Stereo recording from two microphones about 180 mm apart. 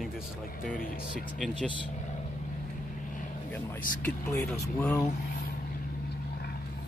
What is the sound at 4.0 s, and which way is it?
Speech, 15° left (ahead or behind).